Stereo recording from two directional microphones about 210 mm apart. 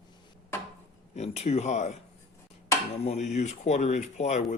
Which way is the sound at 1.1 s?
30° left (ahead or behind).